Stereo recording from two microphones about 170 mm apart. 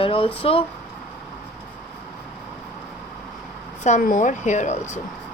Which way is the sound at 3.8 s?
50° left (ahead or behind).